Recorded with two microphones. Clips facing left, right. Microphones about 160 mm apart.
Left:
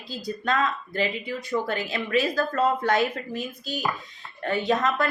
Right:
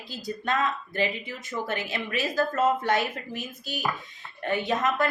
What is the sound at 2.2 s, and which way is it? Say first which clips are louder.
Speech: left 1 dB; 20° right (ahead or behind).